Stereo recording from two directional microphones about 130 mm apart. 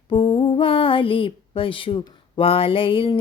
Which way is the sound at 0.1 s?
40° left (ahead or behind).